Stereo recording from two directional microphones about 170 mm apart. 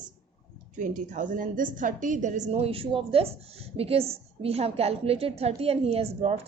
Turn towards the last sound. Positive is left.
turn(degrees=-35)  # may be behind; listen again after turning